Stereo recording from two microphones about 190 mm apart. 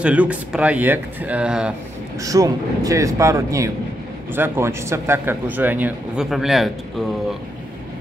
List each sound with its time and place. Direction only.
0.0 s speech: 5° right (ahead or behind)
2.2 s speech: 20° right (ahead or behind); by 6.7 s centre (ahead or behind)